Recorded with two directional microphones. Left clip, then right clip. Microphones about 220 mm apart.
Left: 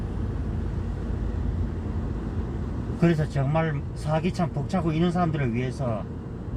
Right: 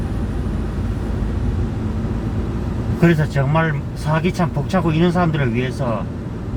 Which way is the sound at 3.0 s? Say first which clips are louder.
Right 8 dB; 20° left (ahead or behind).